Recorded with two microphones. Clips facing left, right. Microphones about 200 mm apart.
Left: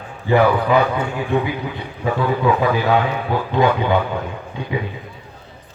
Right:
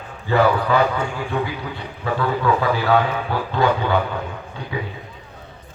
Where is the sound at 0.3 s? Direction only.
15° left (ahead or behind).